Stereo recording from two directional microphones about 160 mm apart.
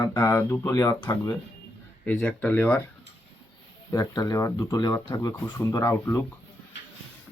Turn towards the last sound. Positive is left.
turn(degrees=15)  # may be behind; listen again after turning